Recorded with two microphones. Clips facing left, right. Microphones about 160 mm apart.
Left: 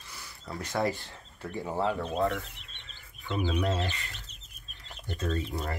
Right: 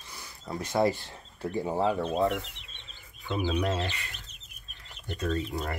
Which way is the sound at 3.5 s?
20° right (ahead or behind).